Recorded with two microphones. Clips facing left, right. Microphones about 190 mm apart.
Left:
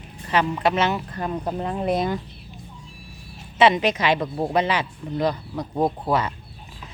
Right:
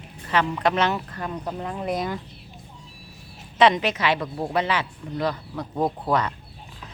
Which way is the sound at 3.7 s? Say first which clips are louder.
Left 3 dB; 15° left (ahead or behind).